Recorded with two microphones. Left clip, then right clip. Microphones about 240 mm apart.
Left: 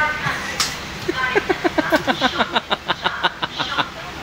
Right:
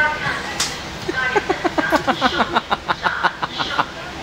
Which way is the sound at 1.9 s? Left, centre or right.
Centre.